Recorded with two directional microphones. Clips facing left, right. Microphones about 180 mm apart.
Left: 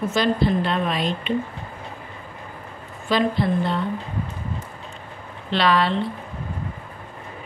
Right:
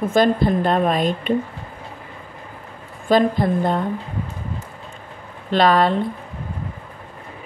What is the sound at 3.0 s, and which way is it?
Speech, 50° right (ahead or behind).